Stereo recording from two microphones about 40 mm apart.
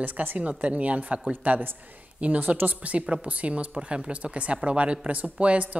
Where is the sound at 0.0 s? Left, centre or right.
Right.